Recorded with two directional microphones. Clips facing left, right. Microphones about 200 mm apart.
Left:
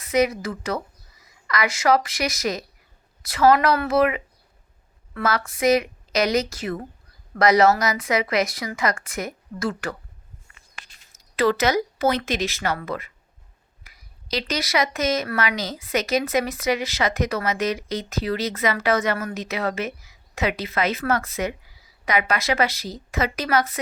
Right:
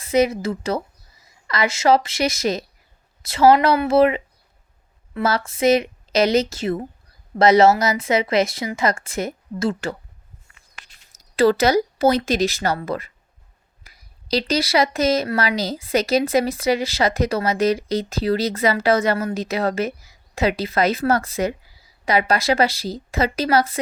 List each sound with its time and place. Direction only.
0.0 s speech: 25° right (ahead or behind)
11.3 s speech: 30° right (ahead or behind)